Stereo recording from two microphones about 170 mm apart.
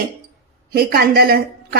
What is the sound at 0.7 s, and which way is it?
Speech, 65° right (ahead or behind).